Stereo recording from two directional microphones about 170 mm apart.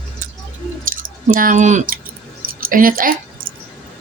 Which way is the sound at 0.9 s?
55° right (ahead or behind).